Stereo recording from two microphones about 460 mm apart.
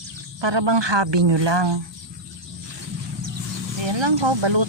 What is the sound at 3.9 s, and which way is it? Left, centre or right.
Speech, right.